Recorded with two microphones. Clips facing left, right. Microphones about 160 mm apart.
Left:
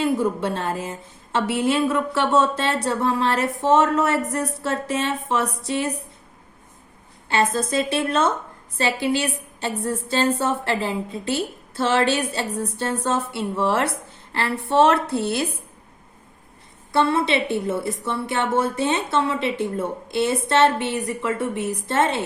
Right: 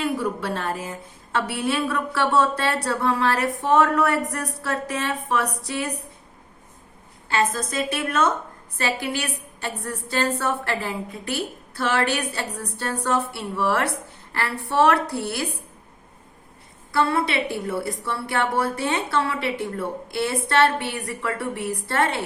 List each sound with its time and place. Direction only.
0.0 s a woman's voice: 25° left (ahead or behind)
7.3 s a woman's voice: 25° left (ahead or behind)
16.9 s a woman's voice: 25° left (ahead or behind)